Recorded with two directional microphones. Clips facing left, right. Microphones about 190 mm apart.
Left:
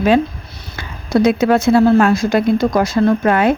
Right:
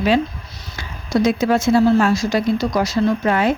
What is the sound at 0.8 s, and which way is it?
Speech, 60° left (ahead or behind).